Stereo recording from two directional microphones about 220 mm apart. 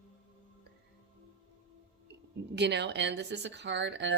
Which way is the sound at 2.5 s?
50° right (ahead or behind).